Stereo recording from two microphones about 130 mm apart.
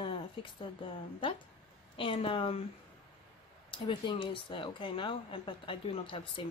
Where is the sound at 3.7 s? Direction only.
40° left (ahead or behind).